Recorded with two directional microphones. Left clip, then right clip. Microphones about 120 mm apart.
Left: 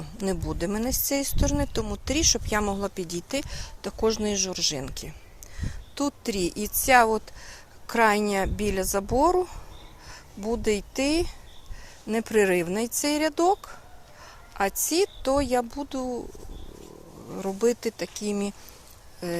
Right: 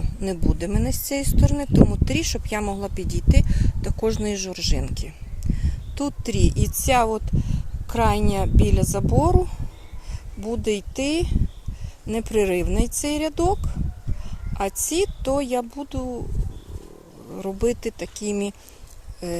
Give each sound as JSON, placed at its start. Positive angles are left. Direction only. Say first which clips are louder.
{"t": 0.2, "sound": "speech", "louder": "right 2 dB", "side_deg": -25}
{"t": 17.6, "sound": "speech", "louder": "right 1 dB", "side_deg": -30}